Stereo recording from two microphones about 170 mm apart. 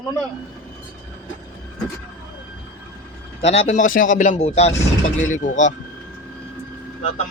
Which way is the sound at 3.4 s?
40° left (ahead or behind).